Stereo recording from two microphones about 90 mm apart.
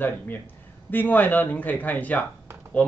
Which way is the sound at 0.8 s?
20° left (ahead or behind).